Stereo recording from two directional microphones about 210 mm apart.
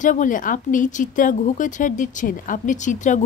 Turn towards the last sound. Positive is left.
turn(degrees=35)  # may be behind; listen again after turning